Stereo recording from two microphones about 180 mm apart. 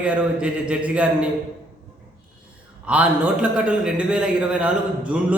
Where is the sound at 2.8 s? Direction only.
5° right (ahead or behind).